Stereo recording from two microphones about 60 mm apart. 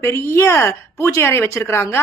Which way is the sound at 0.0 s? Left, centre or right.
Left.